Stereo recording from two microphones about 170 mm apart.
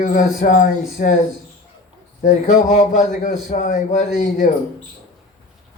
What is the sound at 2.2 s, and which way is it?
Speech, 45° left (ahead or behind).